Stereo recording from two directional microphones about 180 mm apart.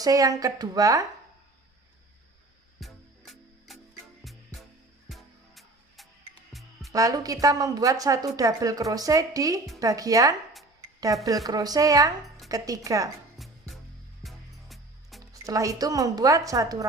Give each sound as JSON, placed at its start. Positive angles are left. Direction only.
{"t": 0.0, "sound": "a woman's voice", "side_deg": -20}
{"t": 2.8, "sound": "music", "side_deg": 0}
{"t": 6.9, "sound": "a woman's voice", "side_deg": -20}
{"t": 14.2, "sound": "music", "side_deg": 0}
{"t": 15.2, "sound": "a woman's voice", "side_deg": -20}